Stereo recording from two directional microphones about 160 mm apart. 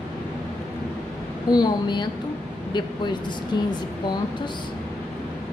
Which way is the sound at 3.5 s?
25° left (ahead or behind).